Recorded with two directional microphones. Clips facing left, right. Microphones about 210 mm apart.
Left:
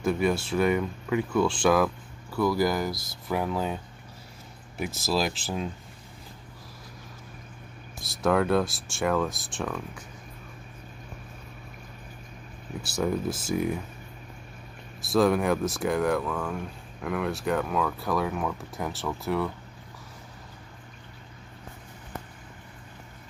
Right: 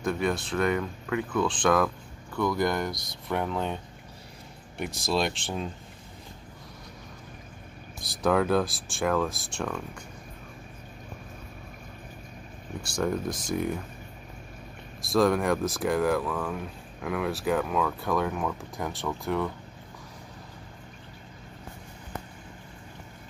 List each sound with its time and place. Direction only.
0.0 s speech: 5° left (ahead or behind)
8.0 s speech: centre (ahead or behind)
12.8 s speech: 5° left (ahead or behind)
15.0 s speech: centre (ahead or behind)